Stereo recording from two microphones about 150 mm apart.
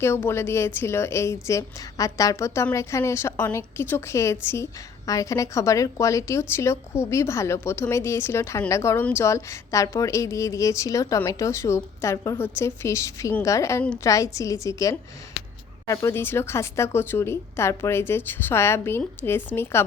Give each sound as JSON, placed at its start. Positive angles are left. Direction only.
{"t": 0.0, "sound": "a woman's voice", "side_deg": 15}